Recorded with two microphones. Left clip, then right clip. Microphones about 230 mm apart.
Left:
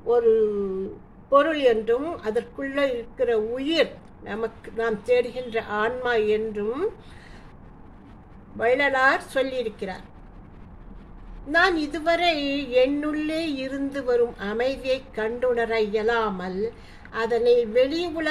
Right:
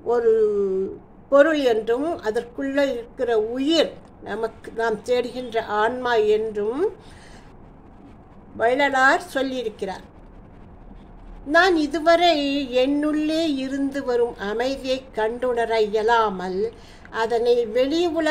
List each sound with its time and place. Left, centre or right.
0.1 s a woman's voice: right
8.5 s a woman's voice: centre
11.5 s a woman's voice: centre